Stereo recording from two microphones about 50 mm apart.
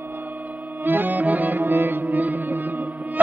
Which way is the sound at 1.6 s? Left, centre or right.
Right.